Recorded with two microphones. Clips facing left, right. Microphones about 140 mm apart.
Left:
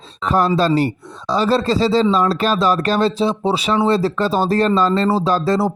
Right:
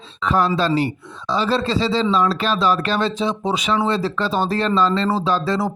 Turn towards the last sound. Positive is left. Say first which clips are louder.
# left 3 dB
turn(degrees=40)  # may be behind; listen again after turning